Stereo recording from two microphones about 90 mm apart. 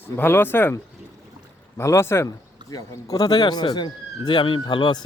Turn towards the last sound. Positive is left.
turn(degrees=55)  # may be behind; listen again after turning